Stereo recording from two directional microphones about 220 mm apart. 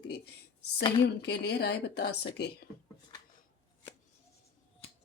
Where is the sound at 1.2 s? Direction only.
50° left (ahead or behind).